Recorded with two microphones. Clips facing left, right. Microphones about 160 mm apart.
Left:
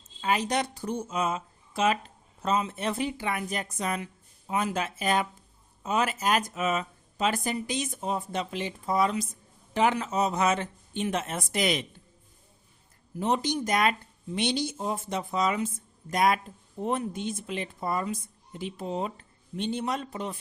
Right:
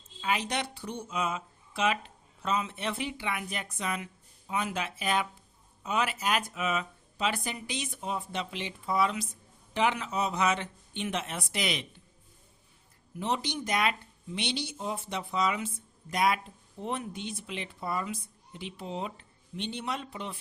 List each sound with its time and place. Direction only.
0.2 s speech: 40° left (ahead or behind)
13.1 s speech: 45° left (ahead or behind)